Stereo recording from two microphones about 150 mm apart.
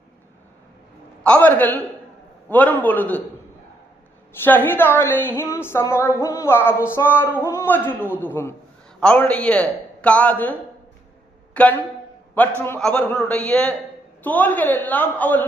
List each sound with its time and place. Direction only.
1.2 s a woman's voice: 10° left (ahead or behind)
4.4 s a woman's voice: 15° left (ahead or behind)
11.5 s a sound: 10° left (ahead or behind)
12.4 s a woman's voice: 10° left (ahead or behind)